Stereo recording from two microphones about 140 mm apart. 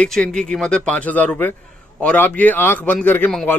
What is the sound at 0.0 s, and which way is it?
Speech, 5° left (ahead or behind).